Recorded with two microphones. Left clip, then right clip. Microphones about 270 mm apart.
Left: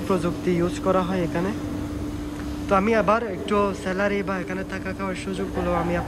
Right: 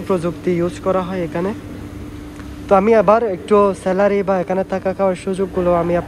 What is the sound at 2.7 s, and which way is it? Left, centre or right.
A man's voice, centre.